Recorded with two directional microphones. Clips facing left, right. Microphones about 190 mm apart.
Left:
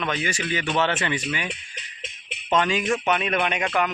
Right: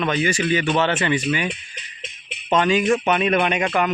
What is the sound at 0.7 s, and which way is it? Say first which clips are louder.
Speech: right 4 dB; 40° right (ahead or behind).